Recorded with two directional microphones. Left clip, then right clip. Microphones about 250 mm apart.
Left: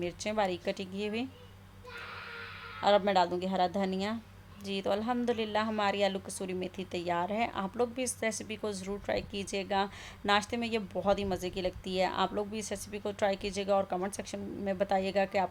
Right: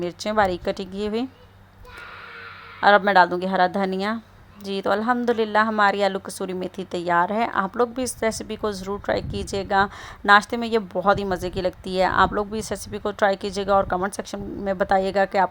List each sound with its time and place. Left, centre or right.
0.0 s a woman's voice: centre
2.8 s a woman's voice: centre